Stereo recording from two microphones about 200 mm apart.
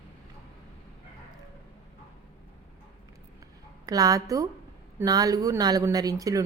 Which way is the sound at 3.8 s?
20° right (ahead or behind).